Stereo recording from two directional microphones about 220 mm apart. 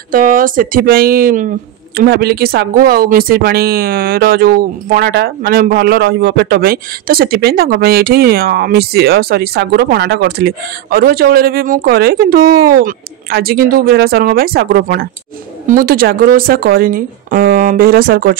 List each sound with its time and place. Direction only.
0.1 s speech: 40° right (ahead or behind)